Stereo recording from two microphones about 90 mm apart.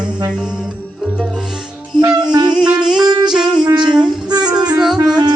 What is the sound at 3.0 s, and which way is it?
Music, 50° right (ahead or behind).